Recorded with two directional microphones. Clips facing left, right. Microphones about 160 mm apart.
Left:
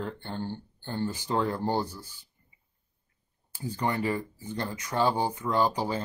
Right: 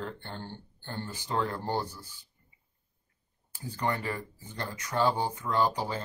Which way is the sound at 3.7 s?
15° left (ahead or behind).